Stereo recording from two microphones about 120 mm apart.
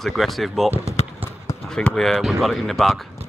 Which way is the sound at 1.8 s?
5° left (ahead or behind).